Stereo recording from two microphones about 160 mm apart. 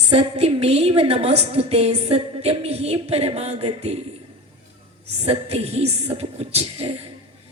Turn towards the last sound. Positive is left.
turn(degrees=-35)  # may be behind; listen again after turning